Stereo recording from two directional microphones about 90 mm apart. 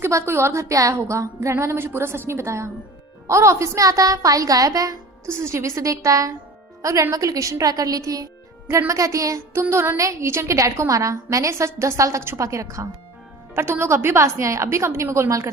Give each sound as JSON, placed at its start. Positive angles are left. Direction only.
{"t": 0.0, "sound": "a woman's voice", "side_deg": -30}
{"t": 5.3, "sound": "a woman's voice", "side_deg": -30}